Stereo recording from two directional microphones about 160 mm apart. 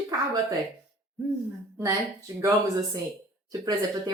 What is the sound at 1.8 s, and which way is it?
Speech, 20° right (ahead or behind).